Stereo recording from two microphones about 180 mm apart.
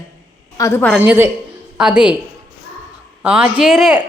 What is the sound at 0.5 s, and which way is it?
Speech, 15° left (ahead or behind).